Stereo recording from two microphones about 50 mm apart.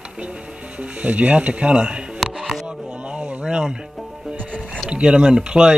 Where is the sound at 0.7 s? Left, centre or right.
Right.